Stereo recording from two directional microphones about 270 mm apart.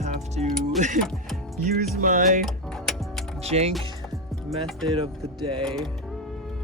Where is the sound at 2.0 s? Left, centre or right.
Right.